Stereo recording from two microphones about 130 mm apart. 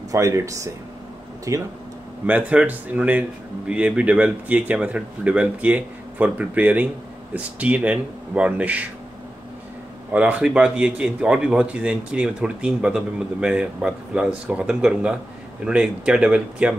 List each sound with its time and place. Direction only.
0.1 s speech: 25° right (ahead or behind)
2.2 s speech: 10° right (ahead or behind)
10.1 s speech: 10° right (ahead or behind)